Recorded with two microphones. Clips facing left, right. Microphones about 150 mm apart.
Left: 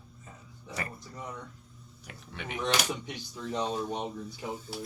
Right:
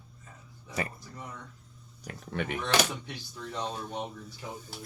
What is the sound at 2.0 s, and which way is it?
Speech, 50° right (ahead or behind).